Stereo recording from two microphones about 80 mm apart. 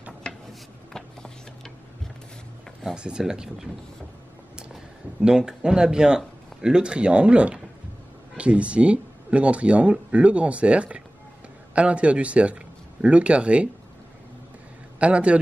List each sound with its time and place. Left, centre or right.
0.3 s a sound: centre
2.8 s speech: centre
5.2 s speech: centre
15.0 s speech: centre